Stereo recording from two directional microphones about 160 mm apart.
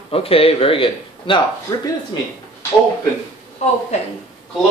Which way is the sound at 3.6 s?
45° left (ahead or behind).